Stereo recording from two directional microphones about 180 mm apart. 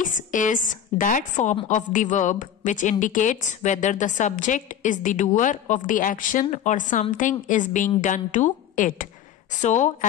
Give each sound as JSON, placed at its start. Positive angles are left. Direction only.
{"t": 0.0, "sound": "a woman's voice", "side_deg": 45}